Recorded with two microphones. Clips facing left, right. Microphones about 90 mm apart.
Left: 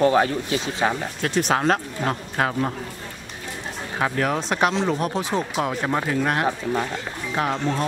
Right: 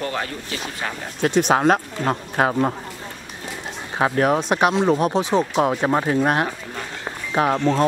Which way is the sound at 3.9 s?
25° right (ahead or behind).